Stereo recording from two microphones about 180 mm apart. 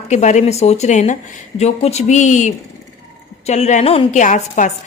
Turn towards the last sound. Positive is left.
turn(degrees=45)  # may be behind; listen again after turning